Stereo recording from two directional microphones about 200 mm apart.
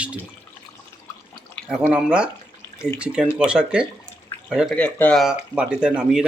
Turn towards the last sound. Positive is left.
turn(degrees=-5)  # may be behind; listen again after turning